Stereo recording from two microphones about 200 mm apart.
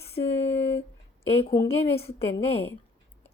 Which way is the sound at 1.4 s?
25° left (ahead or behind).